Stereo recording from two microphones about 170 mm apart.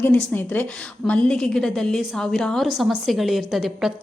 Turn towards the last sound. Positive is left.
turn(degrees=0)  # may be behind; listen again after turning